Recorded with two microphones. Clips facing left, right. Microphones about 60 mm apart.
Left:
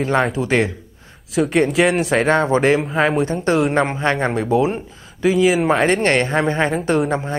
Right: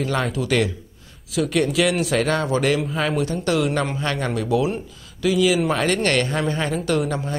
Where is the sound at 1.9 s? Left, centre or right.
Left.